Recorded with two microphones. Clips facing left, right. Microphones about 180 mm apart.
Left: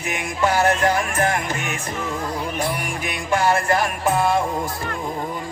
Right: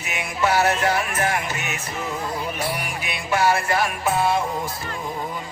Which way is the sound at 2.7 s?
45° left (ahead or behind).